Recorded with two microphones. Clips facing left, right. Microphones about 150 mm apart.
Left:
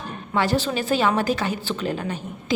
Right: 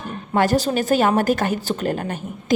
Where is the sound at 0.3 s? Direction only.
45° right (ahead or behind).